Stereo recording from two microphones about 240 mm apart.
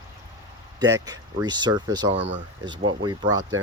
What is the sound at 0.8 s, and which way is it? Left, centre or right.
Speech, centre.